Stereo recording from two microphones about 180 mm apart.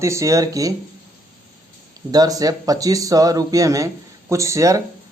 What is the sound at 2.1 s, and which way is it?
Speech, 20° right (ahead or behind).